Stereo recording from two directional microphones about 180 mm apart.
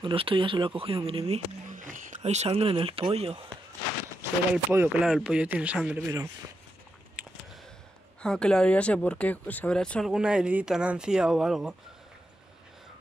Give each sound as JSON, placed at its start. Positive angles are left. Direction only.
{"t": 0.0, "sound": "speech", "side_deg": -30}
{"t": 4.7, "sound": "speech", "side_deg": -5}
{"t": 8.2, "sound": "speech", "side_deg": 5}